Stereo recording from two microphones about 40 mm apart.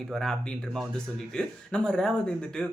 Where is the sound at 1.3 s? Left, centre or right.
Left.